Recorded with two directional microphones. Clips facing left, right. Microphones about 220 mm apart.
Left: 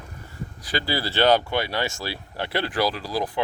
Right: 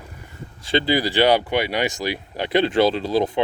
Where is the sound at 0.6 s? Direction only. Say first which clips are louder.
Right 7 dB; 25° right (ahead or behind).